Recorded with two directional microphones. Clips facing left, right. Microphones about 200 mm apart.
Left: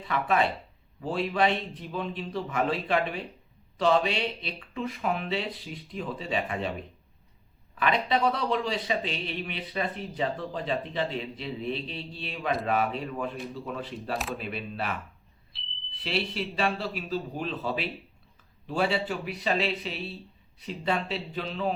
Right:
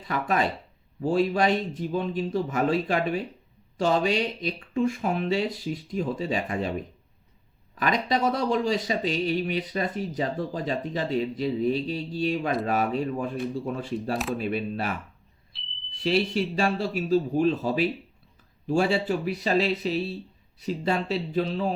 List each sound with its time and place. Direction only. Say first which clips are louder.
0.0 s a man's voice: even; 40° right (ahead or behind)
7.8 s speech: right 1 dB; 40° right (ahead or behind)
15.5 s a sound: even; centre (ahead or behind)
16.0 s a man's voice: right 7 dB; 40° right (ahead or behind)